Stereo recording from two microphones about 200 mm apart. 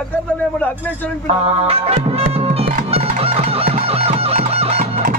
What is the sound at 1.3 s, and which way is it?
Music, 30° right (ahead or behind).